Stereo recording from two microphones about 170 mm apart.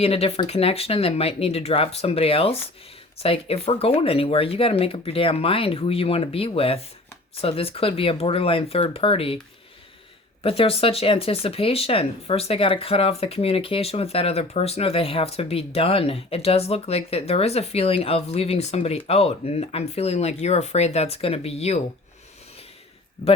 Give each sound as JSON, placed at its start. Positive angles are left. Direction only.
{"t": 0.0, "sound": "speech", "side_deg": 35}
{"t": 10.4, "sound": "speech", "side_deg": 35}